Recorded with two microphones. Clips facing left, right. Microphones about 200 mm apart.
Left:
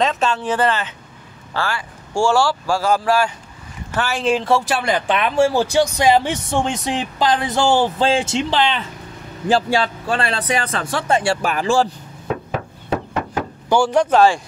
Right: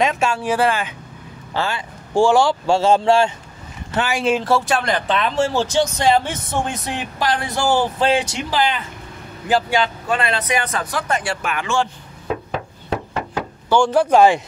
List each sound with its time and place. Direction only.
0.0 s speech: 10° right (ahead or behind); by 11.9 s 35° left (ahead or behind)
13.7 s speech: 5° left (ahead or behind)
14.1 s speech: 15° right (ahead or behind)